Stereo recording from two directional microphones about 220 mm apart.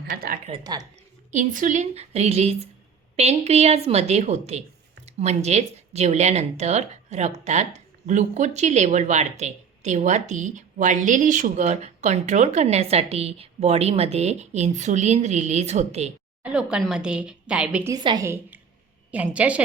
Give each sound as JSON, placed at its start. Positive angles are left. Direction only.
{"t": 0.1, "sound": "a woman's voice", "side_deg": -40}
{"t": 0.4, "sound": "a woman's voice", "side_deg": -20}
{"t": 1.3, "sound": "a woman's voice", "side_deg": -35}
{"t": 16.4, "sound": "a woman's voice", "side_deg": -5}
{"t": 17.9, "sound": "a woman's voice", "side_deg": -20}